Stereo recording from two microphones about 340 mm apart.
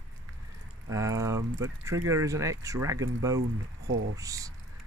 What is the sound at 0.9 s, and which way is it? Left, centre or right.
Speech, centre.